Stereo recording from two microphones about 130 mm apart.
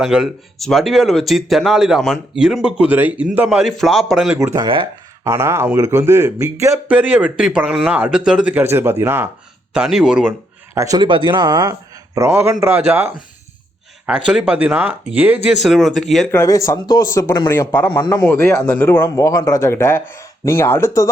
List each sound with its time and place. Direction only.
0.0 s speech: 5° right (ahead or behind)
4.5 s speech: 35° right (ahead or behind)
5.2 s speech: 20° right (ahead or behind)
9.7 s speech: 5° right (ahead or behind)
10.8 s a man's voice: 25° right (ahead or behind)
11.0 s speech: 40° right (ahead or behind); by 13.1 s 15° right (ahead or behind)
14.3 s speech: 10° right (ahead or behind)
15.6 s speech: centre (ahead or behind)
16.3 s speech: 25° left (ahead or behind)
19.1 s speech: 25° left (ahead or behind)